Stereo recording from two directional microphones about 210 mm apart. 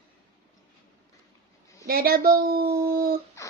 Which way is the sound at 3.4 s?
15° left (ahead or behind).